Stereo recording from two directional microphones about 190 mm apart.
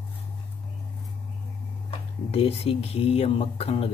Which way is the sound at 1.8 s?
30° left (ahead or behind).